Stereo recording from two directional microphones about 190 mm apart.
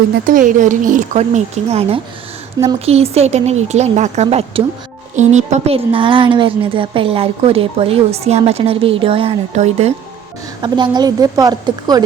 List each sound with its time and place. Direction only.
0.3 s a woman's voice: 45° right (ahead or behind)
10.6 s a woman's voice: 25° right (ahead or behind)